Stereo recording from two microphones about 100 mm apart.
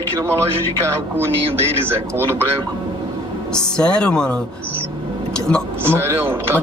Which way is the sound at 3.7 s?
10° left (ahead or behind).